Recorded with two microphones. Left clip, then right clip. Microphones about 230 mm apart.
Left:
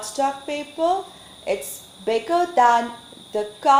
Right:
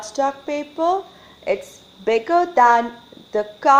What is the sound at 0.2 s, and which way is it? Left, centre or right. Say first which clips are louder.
Speech: right 2 dB; right.